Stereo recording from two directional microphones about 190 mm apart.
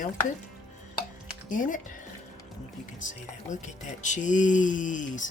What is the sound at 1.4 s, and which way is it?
Speech, 45° left (ahead or behind).